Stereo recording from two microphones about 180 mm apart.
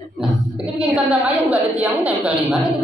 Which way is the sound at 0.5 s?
5° right (ahead or behind).